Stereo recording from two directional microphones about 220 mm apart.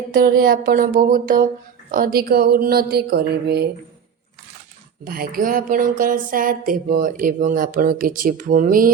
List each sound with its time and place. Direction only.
0.1 s speech: 40° right (ahead or behind)
5.0 s speech: 45° right (ahead or behind)